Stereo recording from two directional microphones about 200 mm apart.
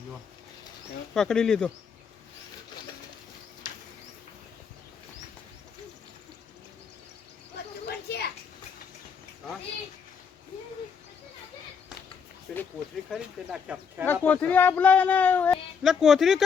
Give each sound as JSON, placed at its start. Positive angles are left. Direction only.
{"t": 1.1, "sound": "speech", "side_deg": 5}
{"t": 7.9, "sound": "a sound", "side_deg": 55}
{"t": 12.5, "sound": "speech", "side_deg": 5}
{"t": 14.0, "sound": "speech", "side_deg": 10}